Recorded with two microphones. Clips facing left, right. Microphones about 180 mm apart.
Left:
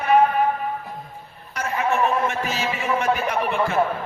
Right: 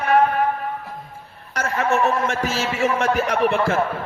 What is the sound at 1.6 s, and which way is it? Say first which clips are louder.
A man's voice: right 2 dB; 90° right.